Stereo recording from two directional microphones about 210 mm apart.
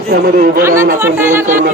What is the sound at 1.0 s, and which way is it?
Speech, 10° right (ahead or behind).